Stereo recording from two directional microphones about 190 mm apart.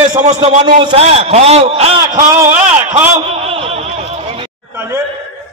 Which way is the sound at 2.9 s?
30° right (ahead or behind).